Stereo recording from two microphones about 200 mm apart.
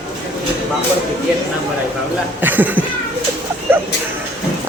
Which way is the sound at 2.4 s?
10° right (ahead or behind).